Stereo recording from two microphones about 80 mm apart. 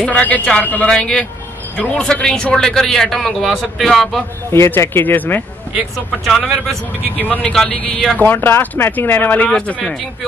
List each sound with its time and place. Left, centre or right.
0.0 s speech: centre
4.5 s speech: left
6.4 s speech: centre
7.2 s speech: left
7.4 s speech: centre
7.7 s speech: centre